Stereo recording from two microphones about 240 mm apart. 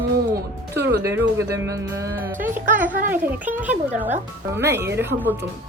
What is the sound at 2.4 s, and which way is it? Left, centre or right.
Speech, right.